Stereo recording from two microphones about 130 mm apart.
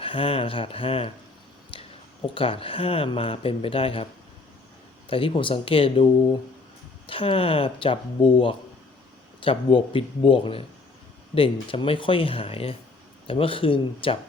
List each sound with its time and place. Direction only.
0.0 s speech: 45° left (ahead or behind)
1.7 s a sound: 45° left (ahead or behind)
2.3 s speech: 45° left (ahead or behind)
7.1 s speech: 45° left (ahead or behind)